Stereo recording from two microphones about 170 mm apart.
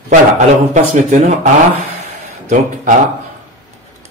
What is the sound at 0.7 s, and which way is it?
A man's voice, 45° right (ahead or behind).